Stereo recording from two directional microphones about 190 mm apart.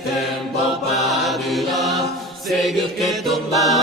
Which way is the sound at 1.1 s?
Centre (ahead or behind).